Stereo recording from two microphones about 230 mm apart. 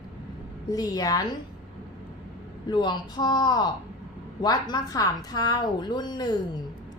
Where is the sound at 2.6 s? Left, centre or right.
Centre.